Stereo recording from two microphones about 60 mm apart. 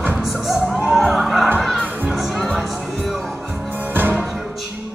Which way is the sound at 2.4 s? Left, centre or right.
Centre.